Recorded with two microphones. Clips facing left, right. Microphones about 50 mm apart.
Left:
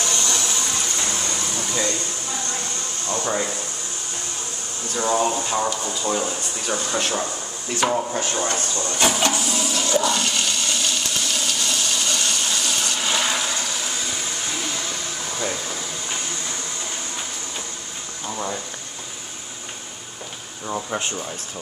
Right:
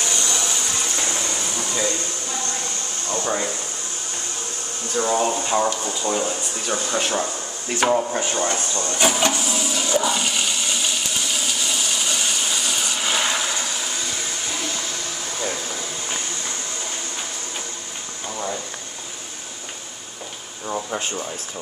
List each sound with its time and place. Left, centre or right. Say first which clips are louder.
0.0 s a sound: even; centre
1.2 s air conditioning: even; centre
3.1 s speech: even; centre
4.9 s speech: even; centre
5.4 s speech: right 2 dB; centre
6.0 s speech: right 1 dB; centre
8.9 s toilet flush: even; centre
18.3 s a sound: even; centre
20.6 s a sound: even; centre